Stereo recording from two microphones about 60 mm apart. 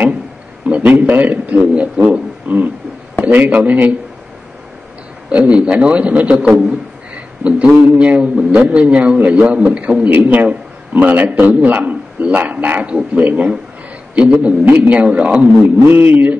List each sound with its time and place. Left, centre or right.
0.7 s a man's voice: right
2.4 s beatboxing: right
3.3 s a man's voice: right
5.3 s a man's voice: centre
15.9 s a sound: right